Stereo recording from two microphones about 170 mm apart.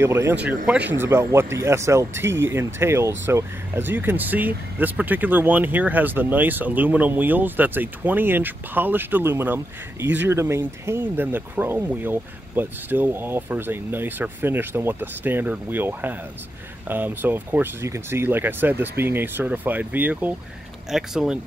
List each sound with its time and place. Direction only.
0.0 s speech: 15° right (ahead or behind)